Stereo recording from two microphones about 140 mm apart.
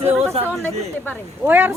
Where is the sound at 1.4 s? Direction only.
15° right (ahead or behind).